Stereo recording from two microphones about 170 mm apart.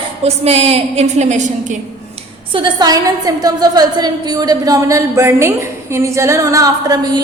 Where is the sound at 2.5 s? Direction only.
25° right (ahead or behind).